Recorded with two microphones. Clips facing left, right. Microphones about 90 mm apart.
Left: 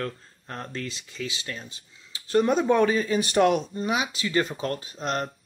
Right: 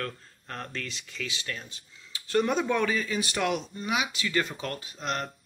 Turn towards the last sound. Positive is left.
turn(degrees=30)  # may be behind; listen again after turning